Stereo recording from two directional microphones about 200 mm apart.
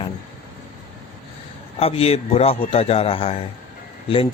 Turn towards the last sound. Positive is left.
turn(degrees=25)  # may be behind; listen again after turning